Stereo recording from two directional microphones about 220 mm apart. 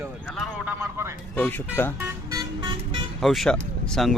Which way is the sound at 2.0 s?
20° right (ahead or behind).